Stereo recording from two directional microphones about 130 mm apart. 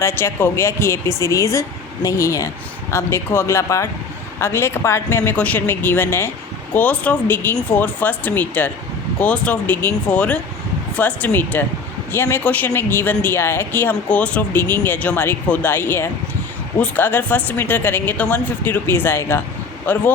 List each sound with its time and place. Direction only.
0.0 s a woman's voice: 20° left (ahead or behind)